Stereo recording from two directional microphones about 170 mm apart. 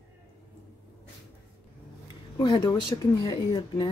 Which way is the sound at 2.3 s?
20° left (ahead or behind).